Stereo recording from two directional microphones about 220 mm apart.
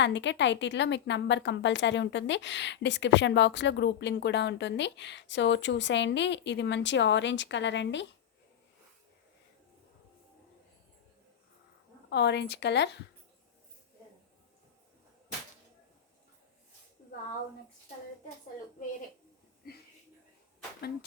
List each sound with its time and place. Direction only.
0.0 s a woman's voice: 55° left (ahead or behind)
12.1 s a woman's voice: 50° left (ahead or behind)